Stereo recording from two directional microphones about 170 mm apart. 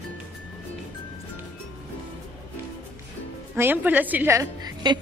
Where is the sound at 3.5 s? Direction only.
10° right (ahead or behind).